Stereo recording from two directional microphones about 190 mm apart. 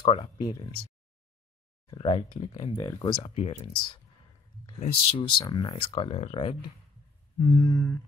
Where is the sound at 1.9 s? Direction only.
30° left (ahead or behind).